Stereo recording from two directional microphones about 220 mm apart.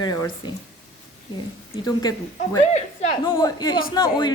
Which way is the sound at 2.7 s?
25° left (ahead or behind).